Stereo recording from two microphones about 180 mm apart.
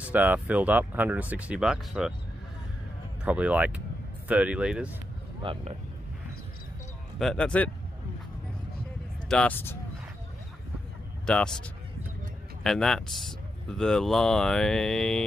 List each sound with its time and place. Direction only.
0.1 s speech: 10° right (ahead or behind)
3.3 s speech: 5° right (ahead or behind)
5.4 s speech: 30° right (ahead or behind)
7.2 s speech: 5° left (ahead or behind)
9.3 s speech: 10° left (ahead or behind)
11.2 s speech: 5° left (ahead or behind)
12.6 s speech: centre (ahead or behind)